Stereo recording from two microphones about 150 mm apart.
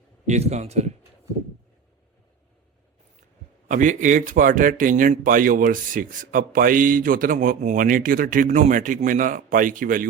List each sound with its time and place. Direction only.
0.3 s speech: 45° right (ahead or behind)
3.7 s speech: 55° right (ahead or behind)